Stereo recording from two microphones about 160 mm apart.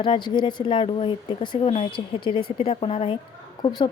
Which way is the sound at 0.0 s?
30° left (ahead or behind).